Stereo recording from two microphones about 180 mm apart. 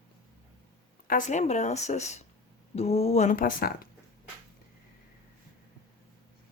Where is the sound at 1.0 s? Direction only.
45° left (ahead or behind).